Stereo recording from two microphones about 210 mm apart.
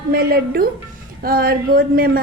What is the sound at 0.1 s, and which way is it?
Speech, 45° right (ahead or behind).